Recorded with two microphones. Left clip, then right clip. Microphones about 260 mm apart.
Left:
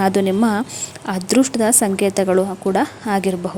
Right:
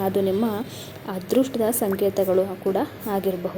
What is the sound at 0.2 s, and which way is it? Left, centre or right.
A woman's voice, left.